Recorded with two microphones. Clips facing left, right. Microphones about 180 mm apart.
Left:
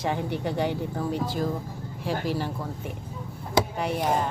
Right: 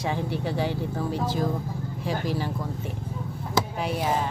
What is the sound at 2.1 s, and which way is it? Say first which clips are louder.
Speech: left 1 dB; 10° left (ahead or behind).